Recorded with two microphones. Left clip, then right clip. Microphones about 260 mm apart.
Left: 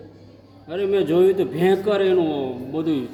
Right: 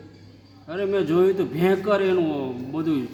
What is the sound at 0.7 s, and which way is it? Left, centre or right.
A man's voice, centre.